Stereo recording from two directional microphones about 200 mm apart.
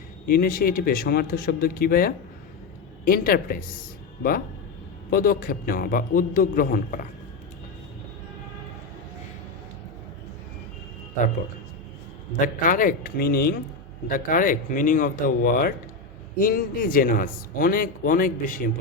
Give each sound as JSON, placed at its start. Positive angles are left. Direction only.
{"t": 0.3, "sound": "a man's voice", "side_deg": 45}
{"t": 5.1, "sound": "a man's voice", "side_deg": 45}
{"t": 12.4, "sound": "a man's voice", "side_deg": 45}